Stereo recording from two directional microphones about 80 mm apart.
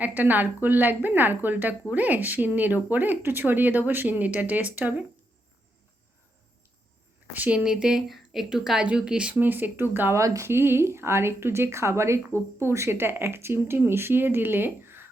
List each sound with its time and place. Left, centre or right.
0.0 s speech: right
7.3 s a woman's voice: centre
9.3 s speech: right
10.2 s speech: right